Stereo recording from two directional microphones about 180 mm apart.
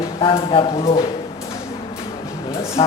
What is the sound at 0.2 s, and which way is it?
Speech, 30° left (ahead or behind).